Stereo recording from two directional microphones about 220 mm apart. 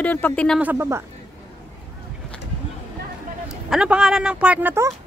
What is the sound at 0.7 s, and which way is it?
Speech, 10° right (ahead or behind).